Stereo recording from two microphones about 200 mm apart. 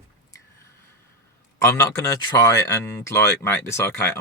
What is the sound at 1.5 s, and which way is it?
A man's voice, 10° left (ahead or behind).